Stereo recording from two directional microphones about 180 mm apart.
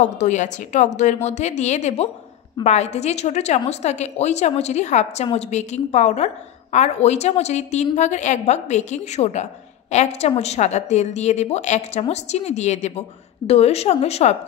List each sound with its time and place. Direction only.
0.0 s a woman's voice: 40° left (ahead or behind)